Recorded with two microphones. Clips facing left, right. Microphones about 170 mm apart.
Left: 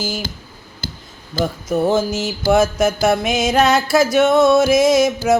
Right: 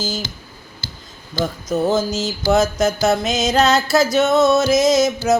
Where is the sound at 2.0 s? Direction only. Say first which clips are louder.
Left 1 dB; 20° right (ahead or behind).